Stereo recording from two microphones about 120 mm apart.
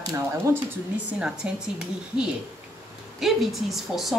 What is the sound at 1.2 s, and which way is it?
A woman's voice, 5° right (ahead or behind).